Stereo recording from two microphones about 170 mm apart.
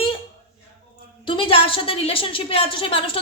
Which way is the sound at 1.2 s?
30° left (ahead or behind).